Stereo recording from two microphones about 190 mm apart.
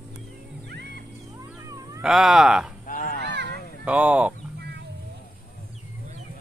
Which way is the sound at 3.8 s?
5° right (ahead or behind).